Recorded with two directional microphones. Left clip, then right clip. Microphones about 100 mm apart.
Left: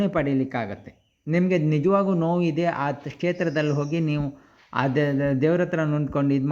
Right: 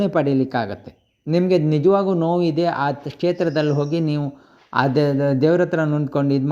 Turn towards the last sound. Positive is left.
turn(degrees=-15)  # may be behind; listen again after turning